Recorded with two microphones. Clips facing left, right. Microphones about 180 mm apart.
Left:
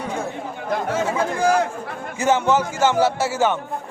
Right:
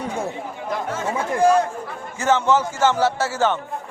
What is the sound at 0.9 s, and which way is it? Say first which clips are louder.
Speech: right 2 dB; 90° left.